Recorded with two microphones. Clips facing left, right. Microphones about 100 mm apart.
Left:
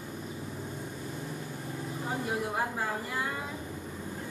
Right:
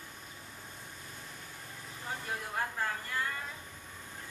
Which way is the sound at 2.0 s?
15° left (ahead or behind).